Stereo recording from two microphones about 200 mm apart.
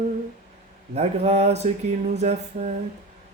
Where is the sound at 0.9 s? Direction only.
30° right (ahead or behind).